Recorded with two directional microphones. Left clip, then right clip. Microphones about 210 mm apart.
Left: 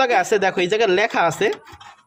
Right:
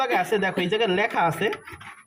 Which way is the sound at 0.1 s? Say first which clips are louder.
Left 5 dB; 40° left (ahead or behind).